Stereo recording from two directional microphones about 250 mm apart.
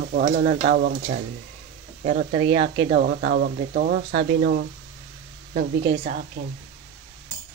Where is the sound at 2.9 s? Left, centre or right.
Right.